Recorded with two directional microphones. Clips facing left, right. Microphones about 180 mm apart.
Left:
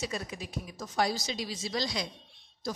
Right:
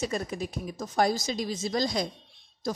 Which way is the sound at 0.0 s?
45° right (ahead or behind).